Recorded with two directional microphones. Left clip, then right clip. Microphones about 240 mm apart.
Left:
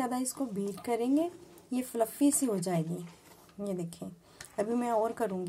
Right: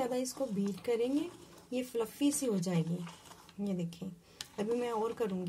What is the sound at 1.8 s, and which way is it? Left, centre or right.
Speech, centre.